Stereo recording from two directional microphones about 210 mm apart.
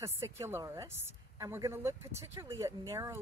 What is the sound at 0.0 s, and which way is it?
Speech, 15° right (ahead or behind).